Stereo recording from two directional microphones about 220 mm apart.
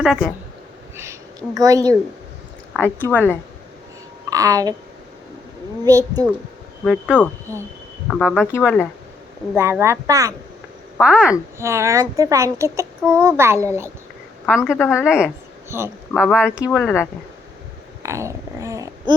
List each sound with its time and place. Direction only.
0.0 s speech: centre (ahead or behind)
1.5 s a woman's voice: 15° right (ahead or behind)
2.7 s a woman's voice: 10° left (ahead or behind)
4.3 s a woman's voice: 15° right (ahead or behind)
5.8 s a woman's voice: 15° right (ahead or behind)
6.8 s speech: centre (ahead or behind)
7.5 s a woman's voice: 15° right (ahead or behind)
8.0 s speech: 5° left (ahead or behind)
9.6 s a woman's voice: 10° right (ahead or behind)
16.6 s a woman's voice: 10° left (ahead or behind)
18.0 s speech: 15° right (ahead or behind)